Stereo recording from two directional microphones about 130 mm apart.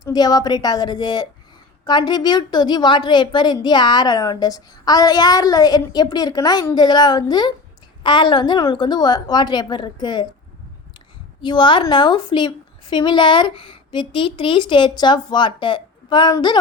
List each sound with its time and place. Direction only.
0.0 s a woman's voice: 30° left (ahead or behind)
11.4 s a woman's voice: 40° left (ahead or behind)